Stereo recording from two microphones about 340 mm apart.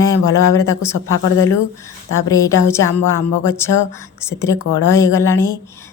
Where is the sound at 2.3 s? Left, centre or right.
Centre.